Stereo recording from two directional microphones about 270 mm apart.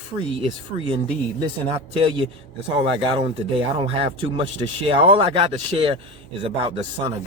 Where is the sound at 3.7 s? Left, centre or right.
Right.